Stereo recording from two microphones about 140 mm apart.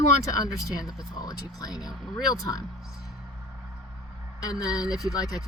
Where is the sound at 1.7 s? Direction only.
5° right (ahead or behind).